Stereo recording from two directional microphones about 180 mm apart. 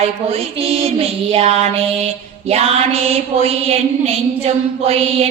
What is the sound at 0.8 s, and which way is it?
A woman's voice, 35° right (ahead or behind).